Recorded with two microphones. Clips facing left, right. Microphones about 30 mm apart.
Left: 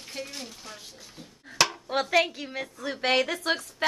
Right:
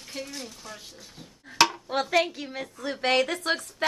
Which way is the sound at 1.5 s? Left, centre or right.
Centre.